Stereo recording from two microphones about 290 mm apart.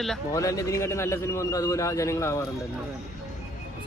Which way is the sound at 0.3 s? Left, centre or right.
Centre.